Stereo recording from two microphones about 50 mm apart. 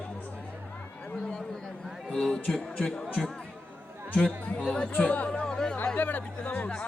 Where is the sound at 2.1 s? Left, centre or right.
Centre.